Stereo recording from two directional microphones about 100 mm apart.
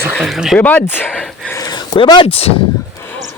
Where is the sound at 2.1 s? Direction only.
70° left (ahead or behind).